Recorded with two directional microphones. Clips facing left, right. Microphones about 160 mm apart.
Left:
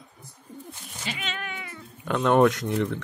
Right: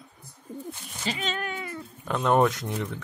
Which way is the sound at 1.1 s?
35° right (ahead or behind).